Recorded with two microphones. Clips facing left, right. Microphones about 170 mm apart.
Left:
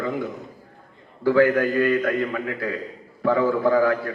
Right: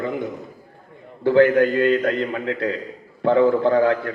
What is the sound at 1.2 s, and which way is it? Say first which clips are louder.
A man's voice: right 3 dB; 25° right (ahead or behind).